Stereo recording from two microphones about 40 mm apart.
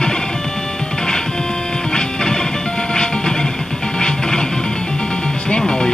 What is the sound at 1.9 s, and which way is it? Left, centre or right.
Music, centre.